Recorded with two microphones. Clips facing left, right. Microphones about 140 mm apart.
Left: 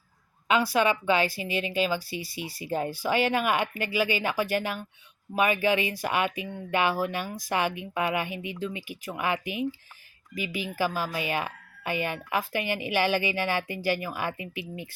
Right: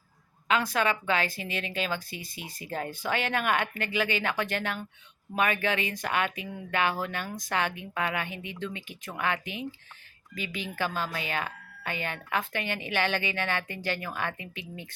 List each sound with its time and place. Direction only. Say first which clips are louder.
0.5 s speech: left 3 dB; 10° left (ahead or behind)
2.9 s speech: left 4 dB; 10° left (ahead or behind)